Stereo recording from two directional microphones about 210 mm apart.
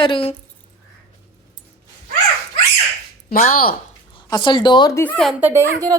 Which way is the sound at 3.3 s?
40° left (ahead or behind).